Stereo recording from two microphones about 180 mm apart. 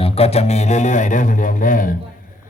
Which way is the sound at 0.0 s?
35° left (ahead or behind).